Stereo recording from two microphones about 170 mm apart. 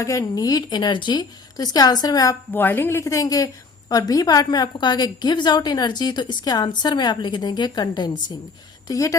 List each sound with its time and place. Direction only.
0.0 s a woman's voice: 20° left (ahead or behind)
2.5 s a woman's voice: 10° left (ahead or behind)